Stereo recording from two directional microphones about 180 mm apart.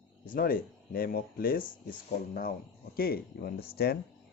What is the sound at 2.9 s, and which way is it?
Speech, 55° left (ahead or behind).